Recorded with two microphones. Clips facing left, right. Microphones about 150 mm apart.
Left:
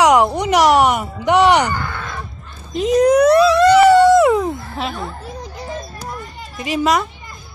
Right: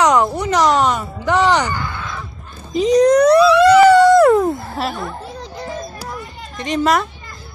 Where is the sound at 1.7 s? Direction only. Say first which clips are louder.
Even; 55° left (ahead or behind).